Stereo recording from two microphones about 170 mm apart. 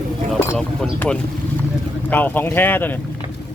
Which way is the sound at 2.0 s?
10° left (ahead or behind).